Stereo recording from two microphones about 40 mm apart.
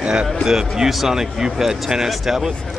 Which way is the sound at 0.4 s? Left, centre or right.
Centre.